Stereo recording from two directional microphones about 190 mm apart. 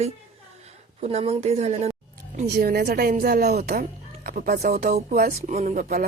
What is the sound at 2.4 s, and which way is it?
Speech, 55° right (ahead or behind).